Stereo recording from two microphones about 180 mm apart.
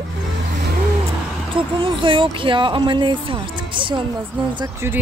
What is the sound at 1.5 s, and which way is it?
Speech, 30° right (ahead or behind).